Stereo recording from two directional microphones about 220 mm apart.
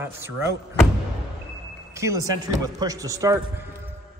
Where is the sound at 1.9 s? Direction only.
15° right (ahead or behind).